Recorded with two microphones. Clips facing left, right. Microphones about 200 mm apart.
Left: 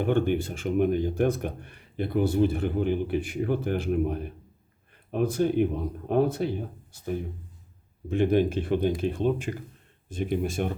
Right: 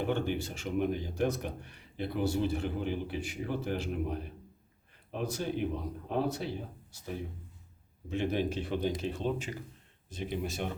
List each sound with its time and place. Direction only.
0.0 s speech: 55° left (ahead or behind)